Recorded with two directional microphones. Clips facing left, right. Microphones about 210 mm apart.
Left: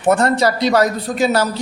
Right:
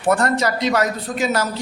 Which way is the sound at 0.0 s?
25° left (ahead or behind).